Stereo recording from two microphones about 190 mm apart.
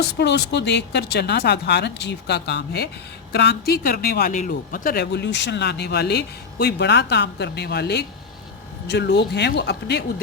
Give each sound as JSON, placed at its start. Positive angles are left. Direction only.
{"t": 0.1, "sound": "speech", "side_deg": 60}